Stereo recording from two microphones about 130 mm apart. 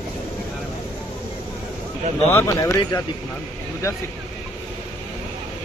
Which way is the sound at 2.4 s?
25° left (ahead or behind).